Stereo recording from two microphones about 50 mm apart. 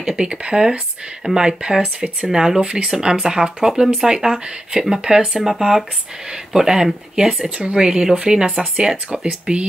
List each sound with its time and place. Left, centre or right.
0.0 s speech: centre